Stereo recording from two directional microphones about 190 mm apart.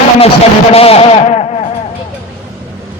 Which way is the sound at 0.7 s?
30° left (ahead or behind).